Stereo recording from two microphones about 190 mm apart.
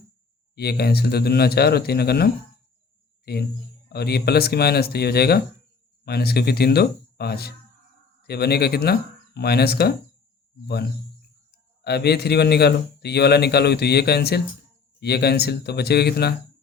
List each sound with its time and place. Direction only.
0.5 s a man's voice: 55° left (ahead or behind)
11.8 s a man's voice: 60° left (ahead or behind)